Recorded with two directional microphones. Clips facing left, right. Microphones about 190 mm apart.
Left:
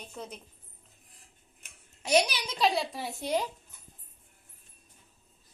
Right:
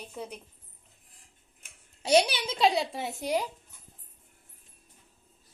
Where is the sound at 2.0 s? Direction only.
30° right (ahead or behind); by 3.5 s 15° right (ahead or behind).